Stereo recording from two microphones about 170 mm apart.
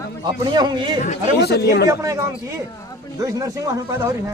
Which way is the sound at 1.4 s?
75° left (ahead or behind).